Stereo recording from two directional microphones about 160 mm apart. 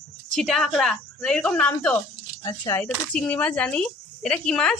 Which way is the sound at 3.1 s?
5° left (ahead or behind).